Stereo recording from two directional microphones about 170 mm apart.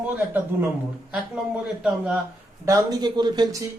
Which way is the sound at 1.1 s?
5° right (ahead or behind).